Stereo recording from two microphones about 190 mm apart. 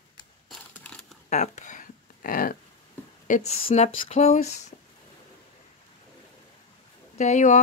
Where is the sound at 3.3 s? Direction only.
35° left (ahead or behind).